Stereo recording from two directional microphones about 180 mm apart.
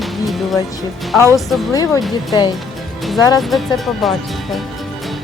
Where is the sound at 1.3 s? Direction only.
Centre (ahead or behind).